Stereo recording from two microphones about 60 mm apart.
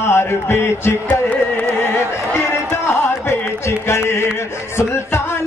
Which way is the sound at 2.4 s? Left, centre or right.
Left.